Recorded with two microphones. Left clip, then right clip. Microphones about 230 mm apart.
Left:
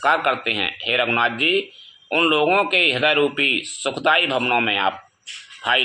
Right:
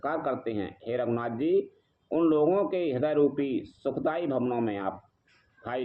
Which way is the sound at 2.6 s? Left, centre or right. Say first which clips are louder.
Left 10 dB; centre.